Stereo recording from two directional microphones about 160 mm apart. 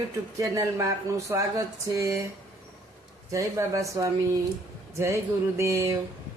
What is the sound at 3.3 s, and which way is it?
Speech, 20° right (ahead or behind).